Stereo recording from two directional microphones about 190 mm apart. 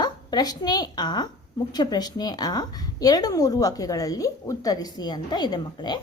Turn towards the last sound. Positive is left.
turn(degrees=20)  # may be behind; listen again after turning